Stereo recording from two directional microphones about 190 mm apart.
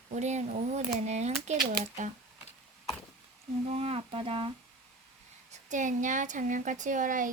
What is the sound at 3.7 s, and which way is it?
Speech, 30° right (ahead or behind).